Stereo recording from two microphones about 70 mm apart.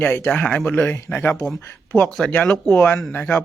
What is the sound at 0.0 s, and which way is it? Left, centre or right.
Speech, left.